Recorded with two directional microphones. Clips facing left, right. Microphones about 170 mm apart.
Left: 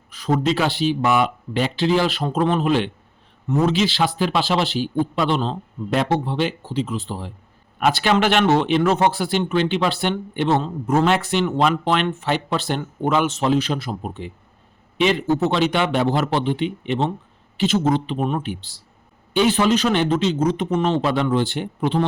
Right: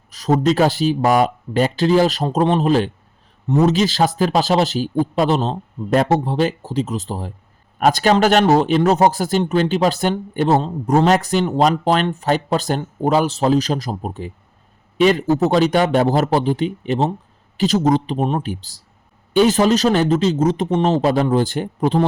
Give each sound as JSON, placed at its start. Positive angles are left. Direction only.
{"t": 0.1, "sound": "a man's voice", "side_deg": -40}